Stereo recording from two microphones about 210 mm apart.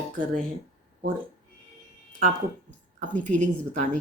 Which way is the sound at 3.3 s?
35° right (ahead or behind).